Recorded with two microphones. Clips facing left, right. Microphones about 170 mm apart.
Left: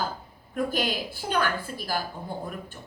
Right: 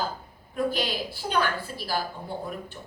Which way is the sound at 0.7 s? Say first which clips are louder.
Left 1 dB; 45° left (ahead or behind).